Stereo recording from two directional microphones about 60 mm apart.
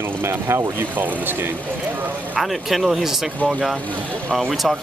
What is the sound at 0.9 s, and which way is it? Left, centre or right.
Speech, right.